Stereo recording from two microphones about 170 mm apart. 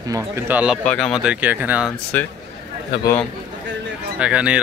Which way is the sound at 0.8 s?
5° left (ahead or behind).